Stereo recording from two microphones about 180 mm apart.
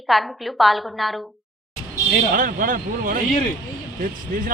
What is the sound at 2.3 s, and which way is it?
Speech, 50° right (ahead or behind).